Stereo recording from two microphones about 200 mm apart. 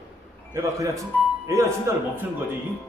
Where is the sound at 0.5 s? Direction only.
15° right (ahead or behind).